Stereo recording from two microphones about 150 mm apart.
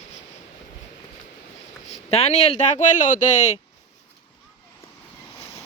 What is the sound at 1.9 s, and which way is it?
Speech, 45° left (ahead or behind).